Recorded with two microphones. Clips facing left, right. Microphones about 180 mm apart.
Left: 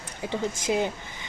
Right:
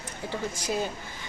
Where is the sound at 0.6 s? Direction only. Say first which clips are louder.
Left 4 dB; 20° left (ahead or behind).